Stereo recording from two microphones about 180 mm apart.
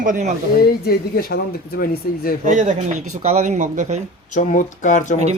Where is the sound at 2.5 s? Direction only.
45° right (ahead or behind).